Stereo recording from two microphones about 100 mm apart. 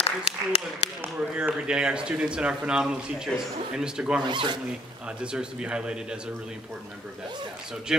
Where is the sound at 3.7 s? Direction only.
5° right (ahead or behind).